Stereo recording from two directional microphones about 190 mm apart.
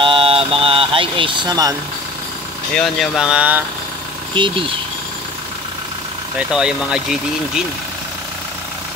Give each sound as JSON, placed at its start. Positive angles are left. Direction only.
{"t": 0.0, "sound": "vehicle", "side_deg": -30}
{"t": 2.7, "sound": "speech", "side_deg": 0}
{"t": 4.4, "sound": "speech", "side_deg": -25}
{"t": 6.5, "sound": "speech", "side_deg": -5}